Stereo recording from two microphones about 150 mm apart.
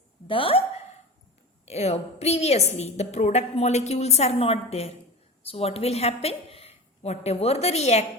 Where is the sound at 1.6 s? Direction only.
45° left (ahead or behind).